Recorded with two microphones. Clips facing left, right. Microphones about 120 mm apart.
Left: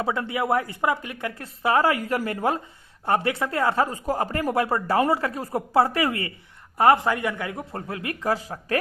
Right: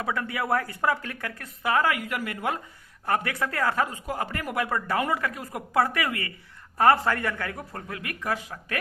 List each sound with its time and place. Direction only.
0.0 s speech: 25° left (ahead or behind)
3.8 s speech: 40° left (ahead or behind)
6.7 s speech: 20° left (ahead or behind); by 8.8 s 35° left (ahead or behind)